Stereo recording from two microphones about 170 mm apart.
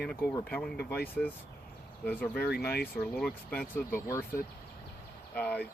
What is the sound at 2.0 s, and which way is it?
Speech, 10° left (ahead or behind).